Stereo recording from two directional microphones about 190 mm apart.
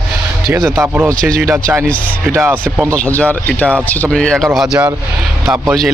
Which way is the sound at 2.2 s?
10° right (ahead or behind).